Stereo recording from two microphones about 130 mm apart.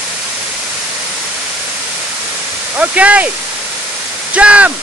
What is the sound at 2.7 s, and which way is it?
Speech, 10° right (ahead or behind).